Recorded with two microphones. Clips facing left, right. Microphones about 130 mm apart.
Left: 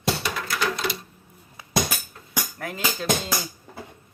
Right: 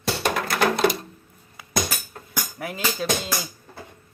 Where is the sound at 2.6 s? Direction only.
10° right (ahead or behind).